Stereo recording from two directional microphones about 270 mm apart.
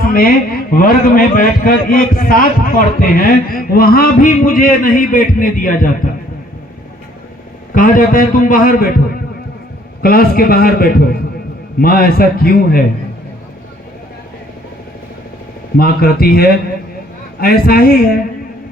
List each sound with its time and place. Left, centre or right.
0.0 s a man's voice: left
7.7 s a man's voice: left
10.0 s a man's voice: left
15.8 s a man's voice: left